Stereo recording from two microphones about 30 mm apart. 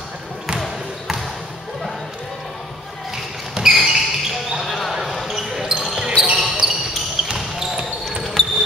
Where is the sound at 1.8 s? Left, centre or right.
Centre.